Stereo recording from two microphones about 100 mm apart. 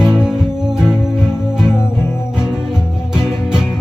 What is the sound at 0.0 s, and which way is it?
Music, 10° right (ahead or behind).